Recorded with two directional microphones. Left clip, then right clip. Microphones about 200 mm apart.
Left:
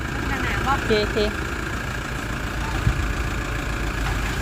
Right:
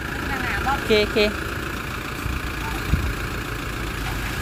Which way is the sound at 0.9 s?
25° right (ahead or behind).